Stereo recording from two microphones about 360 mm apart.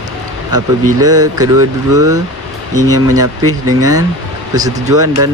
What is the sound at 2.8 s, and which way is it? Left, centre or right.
Speech, right.